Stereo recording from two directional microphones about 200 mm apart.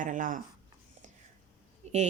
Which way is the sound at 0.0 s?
40° right (ahead or behind).